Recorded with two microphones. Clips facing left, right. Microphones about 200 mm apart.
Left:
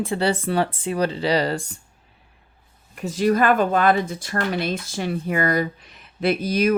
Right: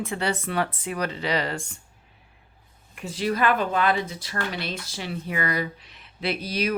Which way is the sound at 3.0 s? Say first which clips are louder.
Left 6 dB; 45° left (ahead or behind).